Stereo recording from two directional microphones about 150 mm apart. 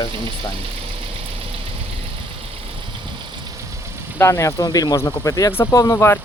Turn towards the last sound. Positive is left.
turn(degrees=15)  # may be behind; listen again after turning